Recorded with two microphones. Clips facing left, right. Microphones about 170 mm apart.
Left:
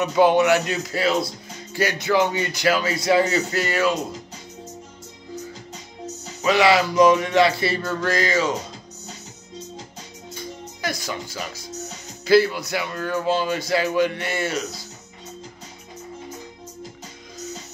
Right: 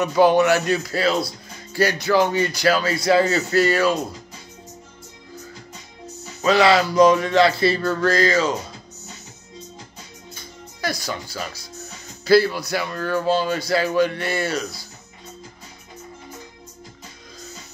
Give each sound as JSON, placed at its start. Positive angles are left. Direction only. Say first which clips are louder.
{"t": 0.0, "sound": "speech", "louder": "right 1 dB", "side_deg": 20}
{"t": 6.4, "sound": "music", "louder": "right 1 dB", "side_deg": 15}
{"t": 12.3, "sound": "music", "louder": "right 1 dB", "side_deg": 15}